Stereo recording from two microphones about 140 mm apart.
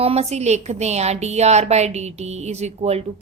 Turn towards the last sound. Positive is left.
turn(degrees=-50)  # may be behind; listen again after turning